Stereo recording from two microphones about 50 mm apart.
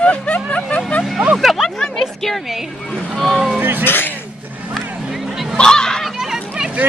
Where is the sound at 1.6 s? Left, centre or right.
Centre.